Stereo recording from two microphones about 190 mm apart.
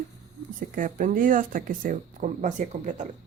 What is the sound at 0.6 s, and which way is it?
A woman's voice, 45° right (ahead or behind).